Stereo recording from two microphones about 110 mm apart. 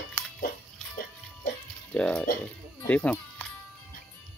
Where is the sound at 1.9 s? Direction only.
10° left (ahead or behind).